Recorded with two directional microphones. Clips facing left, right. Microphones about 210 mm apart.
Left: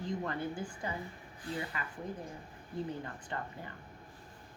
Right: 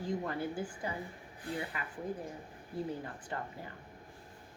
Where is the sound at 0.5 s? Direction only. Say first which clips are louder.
Right 2 dB; 5° right (ahead or behind).